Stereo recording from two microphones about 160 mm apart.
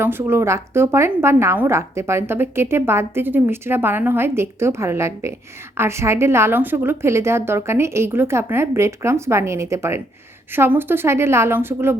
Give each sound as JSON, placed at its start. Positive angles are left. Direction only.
{"t": 0.0, "sound": "a woman's voice", "side_deg": -15}